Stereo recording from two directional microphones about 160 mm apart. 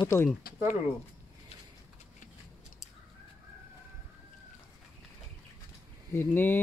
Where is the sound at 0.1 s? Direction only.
15° left (ahead or behind).